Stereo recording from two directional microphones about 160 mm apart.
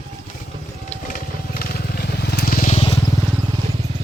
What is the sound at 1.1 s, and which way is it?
Crushing, 65° left (ahead or behind).